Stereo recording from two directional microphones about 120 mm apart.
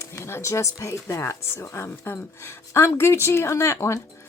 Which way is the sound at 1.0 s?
25° left (ahead or behind).